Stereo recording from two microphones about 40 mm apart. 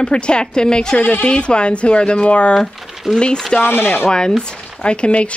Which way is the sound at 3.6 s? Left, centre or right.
Left.